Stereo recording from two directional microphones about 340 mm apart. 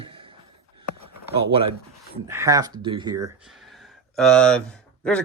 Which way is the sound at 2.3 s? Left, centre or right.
Centre.